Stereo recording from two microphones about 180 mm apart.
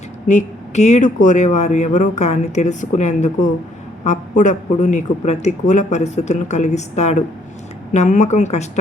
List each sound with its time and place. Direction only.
0.3 s speech: 40° left (ahead or behind)